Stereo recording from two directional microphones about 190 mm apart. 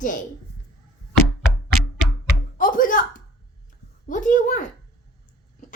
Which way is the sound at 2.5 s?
45° left (ahead or behind).